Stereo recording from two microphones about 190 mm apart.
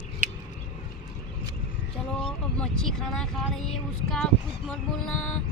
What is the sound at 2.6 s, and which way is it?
Speech, 5° left (ahead or behind).